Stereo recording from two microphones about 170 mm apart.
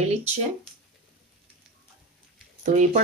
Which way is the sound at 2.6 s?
45° right (ahead or behind).